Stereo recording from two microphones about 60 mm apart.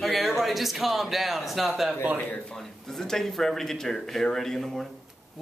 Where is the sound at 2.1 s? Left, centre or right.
Left.